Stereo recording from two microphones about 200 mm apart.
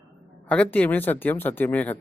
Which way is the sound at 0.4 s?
5° left (ahead or behind).